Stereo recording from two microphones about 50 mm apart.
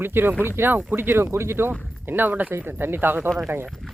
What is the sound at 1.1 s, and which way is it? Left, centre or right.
Speech, right.